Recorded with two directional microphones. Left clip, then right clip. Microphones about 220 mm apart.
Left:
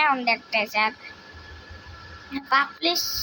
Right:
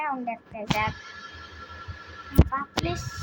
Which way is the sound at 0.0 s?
20° left (ahead or behind).